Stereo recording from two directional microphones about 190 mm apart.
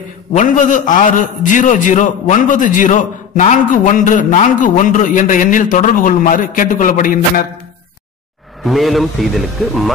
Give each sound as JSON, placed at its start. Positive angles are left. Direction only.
{"t": 0.4, "sound": "a man's voice", "side_deg": 40}
{"t": 8.6, "sound": "a man's voice", "side_deg": 0}